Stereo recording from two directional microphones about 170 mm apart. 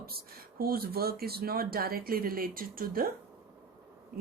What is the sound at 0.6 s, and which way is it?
Speech, 60° right (ahead or behind).